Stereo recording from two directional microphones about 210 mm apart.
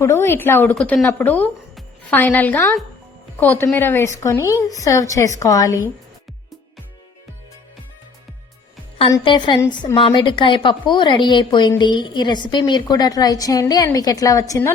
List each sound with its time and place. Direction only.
0.0 s a woman's voice: 10° left (ahead or behind)
9.1 s a woman's voice: 20° left (ahead or behind)